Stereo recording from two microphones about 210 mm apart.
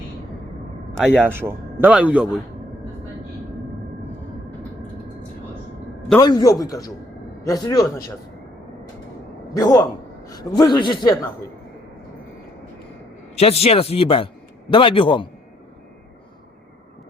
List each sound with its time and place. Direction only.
0.9 s speech: centre (ahead or behind)
1.3 s a man's voice: 10° right (ahead or behind)
6.1 s a man's voice: 15° left (ahead or behind)
9.6 s a man's voice: 15° left (ahead or behind)
13.3 s a man's voice: 30° left (ahead or behind)